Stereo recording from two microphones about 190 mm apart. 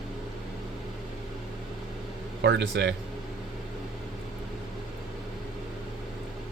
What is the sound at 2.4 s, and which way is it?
Speech, 65° right (ahead or behind).